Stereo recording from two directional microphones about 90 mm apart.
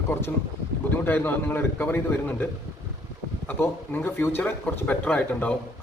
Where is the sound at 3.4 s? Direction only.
25° left (ahead or behind).